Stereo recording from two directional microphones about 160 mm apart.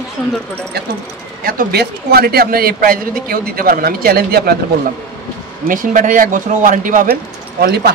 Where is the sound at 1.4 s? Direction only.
65° right (ahead or behind).